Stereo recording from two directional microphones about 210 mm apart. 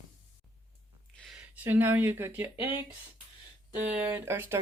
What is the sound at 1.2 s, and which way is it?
Speech, 5° right (ahead or behind).